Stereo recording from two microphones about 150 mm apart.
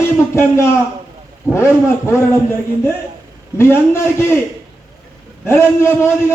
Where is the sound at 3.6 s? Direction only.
15° left (ahead or behind).